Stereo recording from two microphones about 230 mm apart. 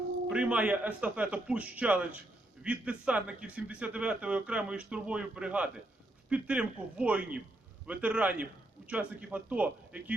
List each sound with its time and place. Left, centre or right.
0.3 s a man's voice: centre